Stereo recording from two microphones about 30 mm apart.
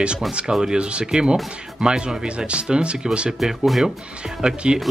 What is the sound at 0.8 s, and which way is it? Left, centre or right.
Speech, right.